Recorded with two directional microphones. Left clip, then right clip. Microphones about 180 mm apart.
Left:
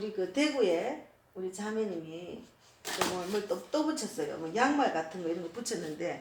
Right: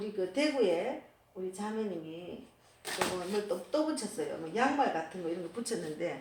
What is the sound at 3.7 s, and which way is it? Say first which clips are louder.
Speech: even; 5° left (ahead or behind).